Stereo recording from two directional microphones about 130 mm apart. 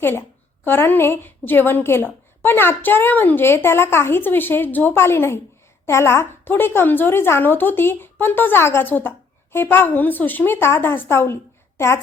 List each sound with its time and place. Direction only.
0.0 s a woman's voice: 15° left (ahead or behind)